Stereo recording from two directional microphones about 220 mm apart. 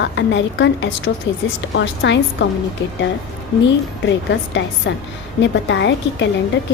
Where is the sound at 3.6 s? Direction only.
55° left (ahead or behind).